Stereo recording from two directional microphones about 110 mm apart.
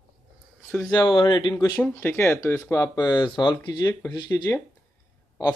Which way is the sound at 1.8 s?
20° left (ahead or behind).